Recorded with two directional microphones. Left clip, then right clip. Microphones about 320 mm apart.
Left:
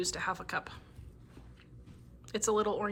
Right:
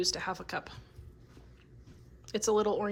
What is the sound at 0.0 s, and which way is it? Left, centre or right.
Speech, centre.